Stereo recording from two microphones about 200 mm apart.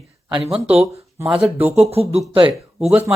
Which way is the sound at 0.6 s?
10° right (ahead or behind).